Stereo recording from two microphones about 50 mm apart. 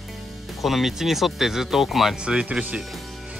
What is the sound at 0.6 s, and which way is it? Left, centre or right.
Speech, centre.